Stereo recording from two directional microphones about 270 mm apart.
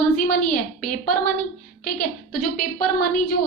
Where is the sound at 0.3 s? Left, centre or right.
Left.